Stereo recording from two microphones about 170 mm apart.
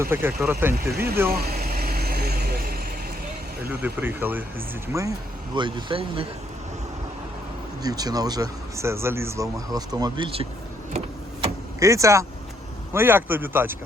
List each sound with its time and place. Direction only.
0.0 s speech: 15° right (ahead or behind)
1.3 s vehicle: 65° right (ahead or behind)
3.7 s speech: 10° right (ahead or behind); by 6.2 s 30° right (ahead or behind)
7.8 s speech: 20° right (ahead or behind)
11.8 s speech: 20° right (ahead or behind)